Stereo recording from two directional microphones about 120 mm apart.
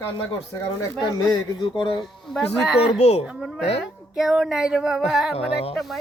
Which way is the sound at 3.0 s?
60° left (ahead or behind).